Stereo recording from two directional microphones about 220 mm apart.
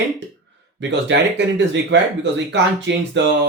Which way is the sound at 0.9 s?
55° right (ahead or behind).